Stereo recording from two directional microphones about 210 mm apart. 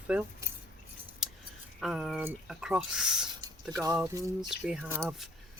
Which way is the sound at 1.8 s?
Centre (ahead or behind).